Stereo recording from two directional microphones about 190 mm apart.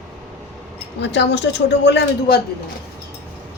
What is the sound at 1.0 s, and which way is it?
A woman's voice, 65° left (ahead or behind).